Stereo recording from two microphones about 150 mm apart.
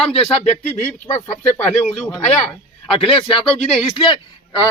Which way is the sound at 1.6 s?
50° left (ahead or behind).